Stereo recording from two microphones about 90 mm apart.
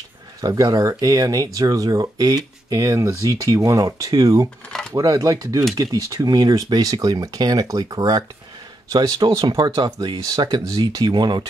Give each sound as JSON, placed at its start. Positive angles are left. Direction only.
{"t": 0.4, "sound": "speech", "side_deg": -40}
{"t": 9.2, "sound": "speech", "side_deg": -60}